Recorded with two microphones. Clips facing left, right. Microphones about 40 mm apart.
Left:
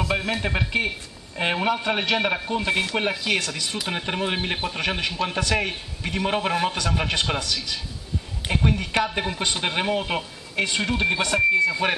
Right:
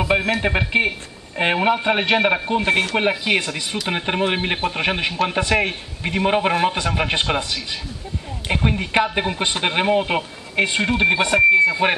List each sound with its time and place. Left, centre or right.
0.0 s speech: right